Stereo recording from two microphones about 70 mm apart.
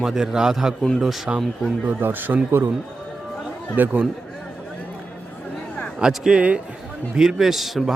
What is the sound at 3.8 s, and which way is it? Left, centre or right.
Speech, right.